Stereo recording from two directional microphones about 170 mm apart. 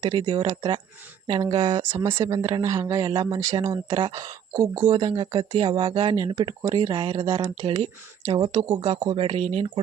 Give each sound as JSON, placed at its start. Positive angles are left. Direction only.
{"t": 0.0, "sound": "speech", "side_deg": -30}
{"t": 2.6, "sound": "speech", "side_deg": -20}
{"t": 7.6, "sound": "speech", "side_deg": -40}